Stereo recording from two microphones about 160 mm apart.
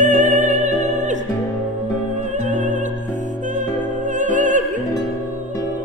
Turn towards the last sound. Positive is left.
turn(degrees=-50)  # may be behind; listen again after turning